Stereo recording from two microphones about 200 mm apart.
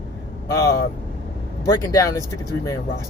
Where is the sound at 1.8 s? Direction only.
15° left (ahead or behind).